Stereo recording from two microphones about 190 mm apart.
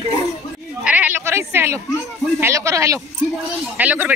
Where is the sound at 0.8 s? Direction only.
10° right (ahead or behind).